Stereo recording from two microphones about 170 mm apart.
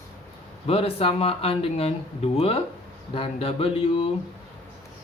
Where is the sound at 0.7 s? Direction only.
35° left (ahead or behind).